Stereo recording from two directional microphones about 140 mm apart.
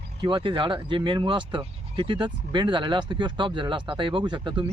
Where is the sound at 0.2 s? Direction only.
35° right (ahead or behind).